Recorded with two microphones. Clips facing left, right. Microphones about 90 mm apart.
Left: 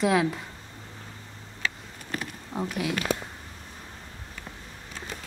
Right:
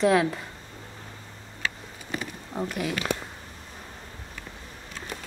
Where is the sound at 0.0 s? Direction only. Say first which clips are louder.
Right 2 dB; centre (ahead or behind).